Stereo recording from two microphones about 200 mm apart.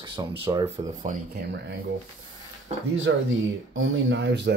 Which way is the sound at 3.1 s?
70° right (ahead or behind).